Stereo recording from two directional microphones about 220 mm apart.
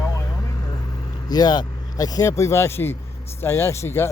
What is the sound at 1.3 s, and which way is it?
Speech, 20° left (ahead or behind).